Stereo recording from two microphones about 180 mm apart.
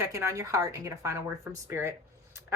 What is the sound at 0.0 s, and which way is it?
Speech, 15° right (ahead or behind).